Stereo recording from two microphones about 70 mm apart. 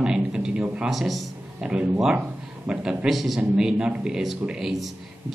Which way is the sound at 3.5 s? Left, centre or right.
Centre.